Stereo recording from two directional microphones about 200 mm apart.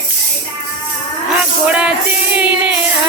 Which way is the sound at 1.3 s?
5° right (ahead or behind).